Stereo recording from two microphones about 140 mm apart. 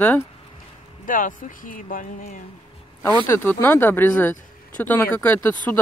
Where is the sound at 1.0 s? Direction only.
70° left (ahead or behind).